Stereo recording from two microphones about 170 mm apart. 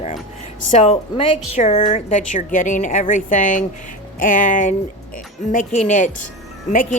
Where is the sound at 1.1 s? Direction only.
35° left (ahead or behind).